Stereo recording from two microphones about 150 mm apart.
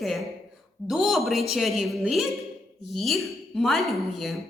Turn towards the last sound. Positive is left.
turn(degrees=0)  # may be behind; listen again after turning